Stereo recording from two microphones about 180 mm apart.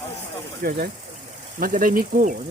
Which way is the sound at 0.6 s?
55° right (ahead or behind).